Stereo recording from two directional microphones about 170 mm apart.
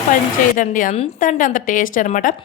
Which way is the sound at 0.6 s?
50° left (ahead or behind).